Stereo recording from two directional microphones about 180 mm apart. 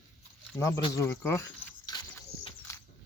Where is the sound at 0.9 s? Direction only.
15° left (ahead or behind).